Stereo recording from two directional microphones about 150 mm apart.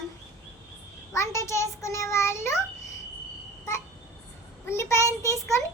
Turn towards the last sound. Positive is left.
turn(degrees=20)  # may be behind; listen again after turning